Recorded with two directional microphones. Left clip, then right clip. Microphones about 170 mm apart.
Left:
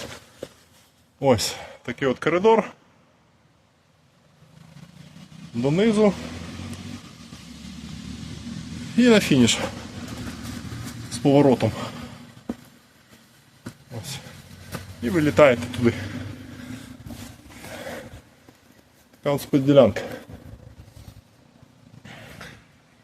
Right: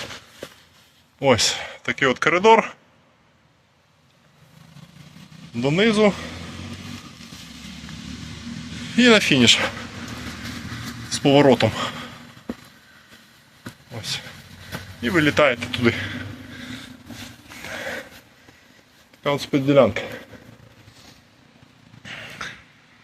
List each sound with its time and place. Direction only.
1.2 s speech: 15° left (ahead or behind)
5.6 s speech: 10° left (ahead or behind)
9.0 s speech: 15° left (ahead or behind)
11.1 s speech: 10° left (ahead or behind)
15.0 s speech: 10° left (ahead or behind)
17.7 s a sound: 10° left (ahead or behind)
19.2 s speech: 30° left (ahead or behind)
22.0 s a sound: 10° left (ahead or behind)